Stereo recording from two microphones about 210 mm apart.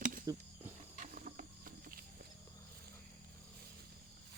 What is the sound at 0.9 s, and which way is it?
Wild animals, 40° right (ahead or behind).